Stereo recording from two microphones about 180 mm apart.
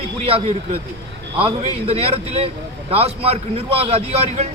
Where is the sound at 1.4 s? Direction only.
30° right (ahead or behind).